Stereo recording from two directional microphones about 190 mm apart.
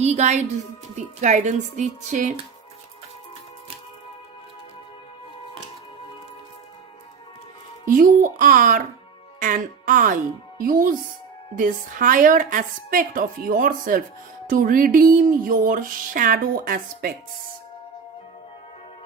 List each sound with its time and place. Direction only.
0.0 s a woman's voice: 35° right (ahead or behind)
7.9 s speech: 45° right (ahead or behind)